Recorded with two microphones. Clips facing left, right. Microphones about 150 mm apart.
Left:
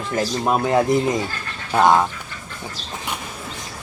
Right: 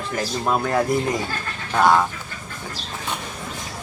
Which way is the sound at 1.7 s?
10° left (ahead or behind).